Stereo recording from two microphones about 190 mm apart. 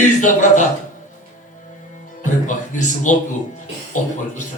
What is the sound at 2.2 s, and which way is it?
Speech, 40° left (ahead or behind).